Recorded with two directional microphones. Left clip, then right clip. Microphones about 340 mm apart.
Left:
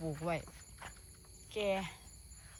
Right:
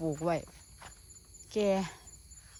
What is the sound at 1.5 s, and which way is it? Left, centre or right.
Speech, right.